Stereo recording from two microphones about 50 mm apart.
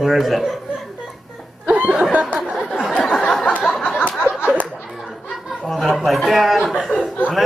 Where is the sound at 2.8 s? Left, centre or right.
Centre.